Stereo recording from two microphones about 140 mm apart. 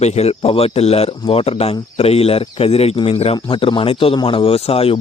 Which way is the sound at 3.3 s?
35° left (ahead or behind).